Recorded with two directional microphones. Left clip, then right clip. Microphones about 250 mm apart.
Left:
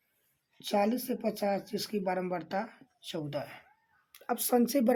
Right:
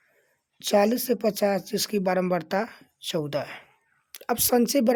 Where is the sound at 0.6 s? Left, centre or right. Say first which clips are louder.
Right 8 dB; right.